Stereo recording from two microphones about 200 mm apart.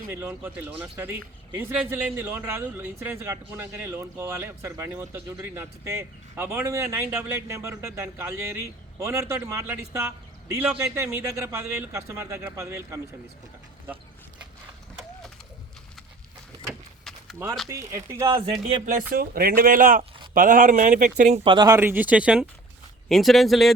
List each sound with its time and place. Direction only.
0.1 s a man's voice: 10° right (ahead or behind)
17.0 s a sound: centre (ahead or behind)
17.7 s a man's voice: 15° right (ahead or behind)
18.6 s speech: 40° right (ahead or behind); by 23.7 s centre (ahead or behind)